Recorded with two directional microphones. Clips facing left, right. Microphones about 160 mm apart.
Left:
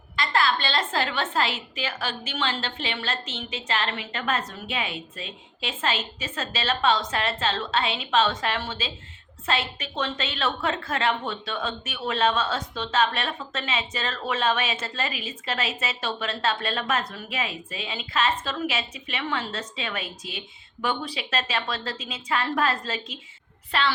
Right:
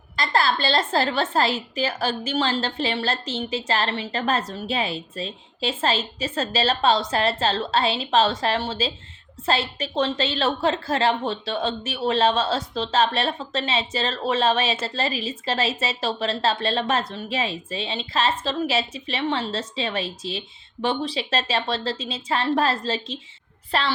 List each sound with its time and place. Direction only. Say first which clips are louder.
0.2 s a woman's voice: right 2 dB; 40° right (ahead or behind)